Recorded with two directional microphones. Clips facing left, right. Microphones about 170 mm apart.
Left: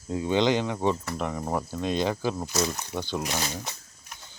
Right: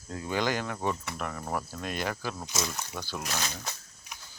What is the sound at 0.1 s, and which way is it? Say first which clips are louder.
Speech: left 7 dB; 20° left (ahead or behind).